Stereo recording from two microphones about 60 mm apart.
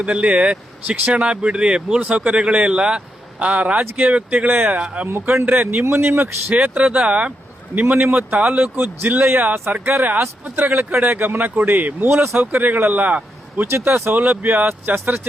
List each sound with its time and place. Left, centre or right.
0.0 s speech: centre
5.5 s speech: right
6.5 s speech: centre
7.8 s speech: right
8.7 s speech: right
9.8 s speech: right
11.0 s speech: right
12.0 s speech: right
12.4 s speech: right
13.7 s speech: right
14.1 s speech: right